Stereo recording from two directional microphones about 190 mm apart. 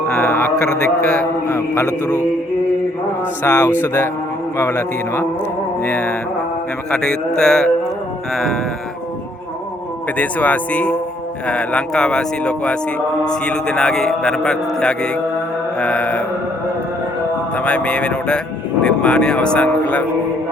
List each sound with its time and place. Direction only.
0.1 s a sound: 15° left (ahead or behind)
0.6 s a man's voice: 50° right (ahead or behind)
1.5 s speech: 15° left (ahead or behind)
3.4 s speech: 20° left (ahead or behind)
5.8 s a man's voice: 10° left (ahead or behind)
10.2 s a man's voice: 10° left (ahead or behind)
17.5 s a man's voice: 5° left (ahead or behind)